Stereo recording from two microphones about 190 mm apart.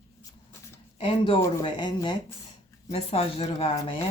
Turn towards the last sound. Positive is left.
turn(degrees=30)  # may be behind; listen again after turning